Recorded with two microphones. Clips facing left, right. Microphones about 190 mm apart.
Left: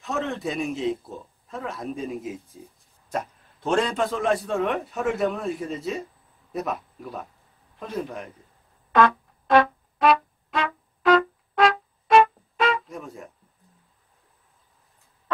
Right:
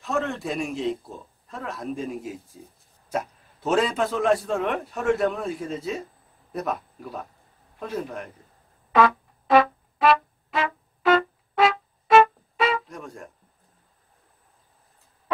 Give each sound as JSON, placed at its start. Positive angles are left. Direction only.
{"t": 0.0, "sound": "a man's voice", "side_deg": 0}
{"t": 8.9, "sound": "brass instrument", "side_deg": -5}